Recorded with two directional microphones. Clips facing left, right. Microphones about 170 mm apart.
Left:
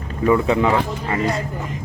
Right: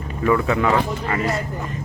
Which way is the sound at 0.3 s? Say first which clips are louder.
Left 2 dB; 20° left (ahead or behind).